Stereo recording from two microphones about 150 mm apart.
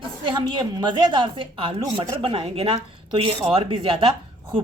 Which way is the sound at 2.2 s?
40° right (ahead or behind).